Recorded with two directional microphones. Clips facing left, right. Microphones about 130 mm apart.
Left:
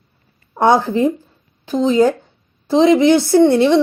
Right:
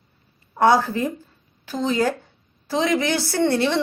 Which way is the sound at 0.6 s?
20° left (ahead or behind).